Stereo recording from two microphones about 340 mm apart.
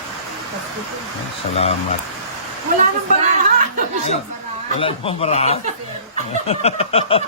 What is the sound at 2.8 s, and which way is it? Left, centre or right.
Speech, right.